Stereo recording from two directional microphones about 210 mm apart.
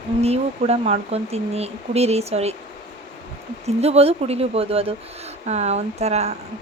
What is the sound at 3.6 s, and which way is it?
Speech, 30° right (ahead or behind).